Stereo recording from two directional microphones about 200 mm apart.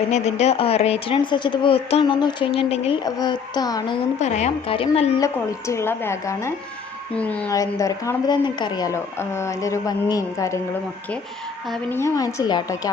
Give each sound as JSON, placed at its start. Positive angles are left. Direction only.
{"t": 0.1, "sound": "speech", "side_deg": 35}
{"t": 4.2, "sound": "a woman's voice", "side_deg": 35}
{"t": 5.2, "sound": "a woman's voice", "side_deg": 15}
{"t": 11.7, "sound": "a woman's voice", "side_deg": 10}